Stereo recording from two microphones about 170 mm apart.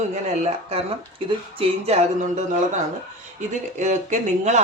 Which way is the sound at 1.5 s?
40° right (ahead or behind).